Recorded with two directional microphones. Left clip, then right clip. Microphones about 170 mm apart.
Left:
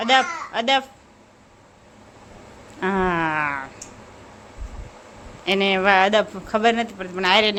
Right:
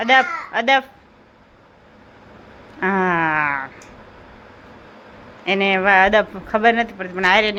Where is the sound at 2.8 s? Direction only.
Centre (ahead or behind).